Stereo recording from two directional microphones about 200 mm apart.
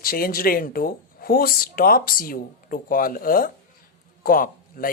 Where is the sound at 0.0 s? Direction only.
45° left (ahead or behind).